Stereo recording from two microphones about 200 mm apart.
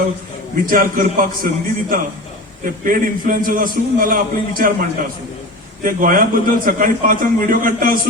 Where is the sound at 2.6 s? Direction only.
45° right (ahead or behind).